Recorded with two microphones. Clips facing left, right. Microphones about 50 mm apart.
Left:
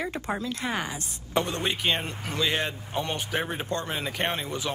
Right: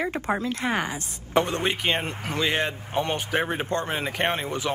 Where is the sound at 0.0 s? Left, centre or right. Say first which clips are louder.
Right 4 dB; right.